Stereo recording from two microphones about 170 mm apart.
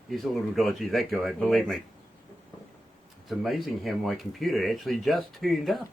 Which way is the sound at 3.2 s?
Centre (ahead or behind).